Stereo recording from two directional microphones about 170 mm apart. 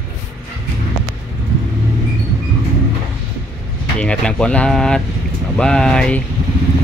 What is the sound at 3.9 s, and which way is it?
Speech, 5° left (ahead or behind).